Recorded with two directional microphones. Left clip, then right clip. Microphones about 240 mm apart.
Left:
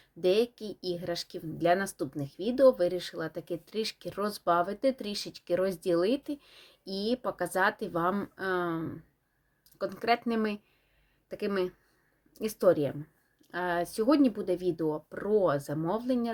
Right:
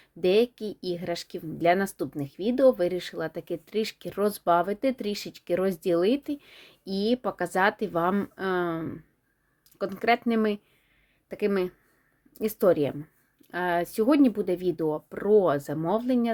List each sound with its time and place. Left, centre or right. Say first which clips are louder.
0.0 s speech: right 4 dB; right